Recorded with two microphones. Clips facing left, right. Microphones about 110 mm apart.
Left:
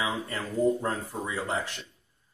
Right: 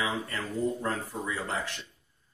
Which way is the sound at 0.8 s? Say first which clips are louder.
Left 1 dB; 25° left (ahead or behind).